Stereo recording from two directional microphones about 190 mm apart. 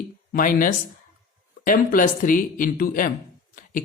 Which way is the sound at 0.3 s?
45° left (ahead or behind).